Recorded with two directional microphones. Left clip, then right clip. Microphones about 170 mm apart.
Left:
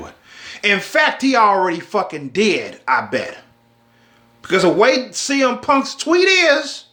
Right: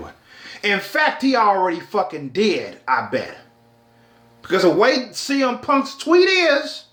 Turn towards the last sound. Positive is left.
turn(degrees=10)  # may be behind; listen again after turning